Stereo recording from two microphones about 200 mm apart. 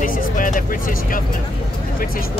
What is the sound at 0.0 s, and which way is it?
Music, 45° left (ahead or behind).